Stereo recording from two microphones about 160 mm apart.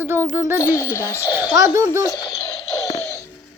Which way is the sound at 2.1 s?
20° left (ahead or behind).